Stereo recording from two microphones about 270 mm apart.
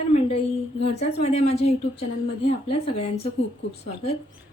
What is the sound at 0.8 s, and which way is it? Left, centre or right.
A woman's voice, left.